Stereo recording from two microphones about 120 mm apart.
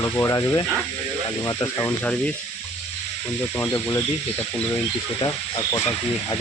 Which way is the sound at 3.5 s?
25° left (ahead or behind).